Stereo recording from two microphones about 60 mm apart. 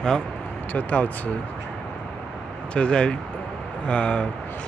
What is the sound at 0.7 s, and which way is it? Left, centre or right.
Speech, left.